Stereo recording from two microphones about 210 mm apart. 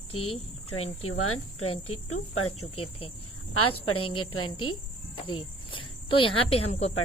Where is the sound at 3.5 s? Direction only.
90° left.